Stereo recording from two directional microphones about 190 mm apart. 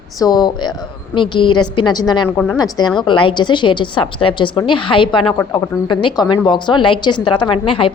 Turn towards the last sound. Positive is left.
turn(degrees=30)  # may be behind; listen again after turning